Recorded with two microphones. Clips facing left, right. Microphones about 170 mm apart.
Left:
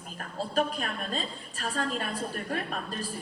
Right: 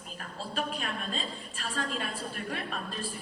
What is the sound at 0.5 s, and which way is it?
A woman's voice, 40° left (ahead or behind).